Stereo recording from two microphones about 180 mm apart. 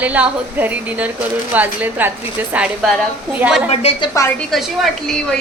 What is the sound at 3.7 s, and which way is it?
Speech, 35° left (ahead or behind).